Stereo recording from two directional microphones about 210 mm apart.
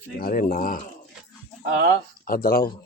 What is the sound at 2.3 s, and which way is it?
Speech, 45° left (ahead or behind).